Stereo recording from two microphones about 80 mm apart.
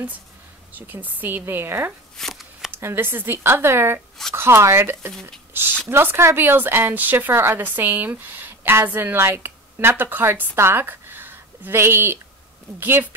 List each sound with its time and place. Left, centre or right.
0.7 s speech: right
2.1 s shuffling cards: centre
2.7 s a woman's voice: right